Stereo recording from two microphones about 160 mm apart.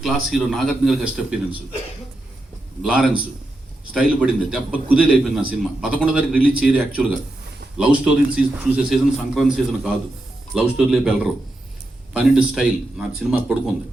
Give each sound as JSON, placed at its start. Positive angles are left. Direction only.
{"t": 0.0, "sound": "a man's voice", "side_deg": 0}
{"t": 2.8, "sound": "a man's voice", "side_deg": -5}
{"t": 4.2, "sound": "a man's voice", "side_deg": -5}